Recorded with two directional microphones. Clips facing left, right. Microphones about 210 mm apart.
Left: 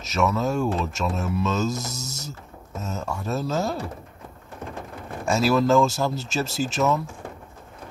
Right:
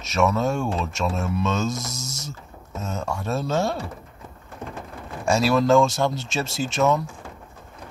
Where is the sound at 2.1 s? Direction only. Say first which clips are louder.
Even; 80° right.